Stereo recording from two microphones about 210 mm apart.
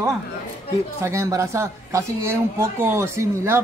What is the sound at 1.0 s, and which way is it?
Speech, 15° right (ahead or behind).